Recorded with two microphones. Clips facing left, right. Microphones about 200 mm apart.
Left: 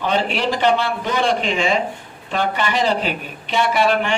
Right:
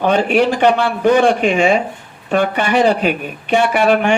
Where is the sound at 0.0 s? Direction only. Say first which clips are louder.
Right 7 dB; 50° right (ahead or behind).